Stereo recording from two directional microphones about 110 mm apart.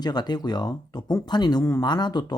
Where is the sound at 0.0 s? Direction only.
40° left (ahead or behind).